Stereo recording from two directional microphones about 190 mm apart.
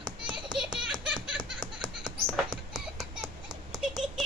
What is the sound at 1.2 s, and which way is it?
Laughter, 5° right (ahead or behind).